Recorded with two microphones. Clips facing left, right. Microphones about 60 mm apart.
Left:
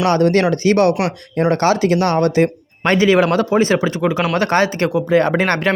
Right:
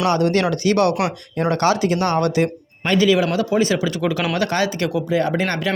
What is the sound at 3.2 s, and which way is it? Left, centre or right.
Speech, left.